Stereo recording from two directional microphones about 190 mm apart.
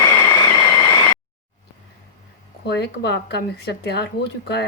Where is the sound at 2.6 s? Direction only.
65° left (ahead or behind).